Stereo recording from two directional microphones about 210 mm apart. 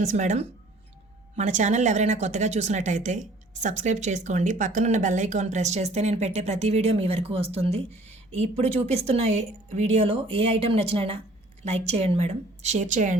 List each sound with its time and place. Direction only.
0.0 s speech: 35° right (ahead or behind)